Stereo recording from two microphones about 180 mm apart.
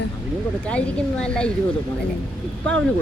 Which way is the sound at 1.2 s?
5° left (ahead or behind).